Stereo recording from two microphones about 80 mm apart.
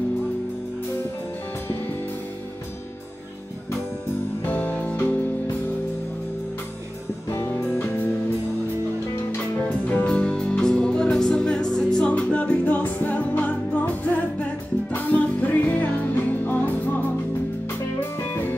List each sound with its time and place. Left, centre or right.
4.5 s music: left
7.8 s music: left
9.7 s music: centre